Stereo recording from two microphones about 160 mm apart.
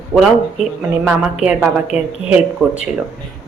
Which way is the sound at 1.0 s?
5° right (ahead or behind).